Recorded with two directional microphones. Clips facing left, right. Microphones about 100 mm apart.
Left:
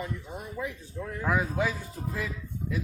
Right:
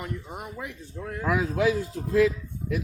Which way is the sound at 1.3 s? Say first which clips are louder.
Right 4 dB; 90° right.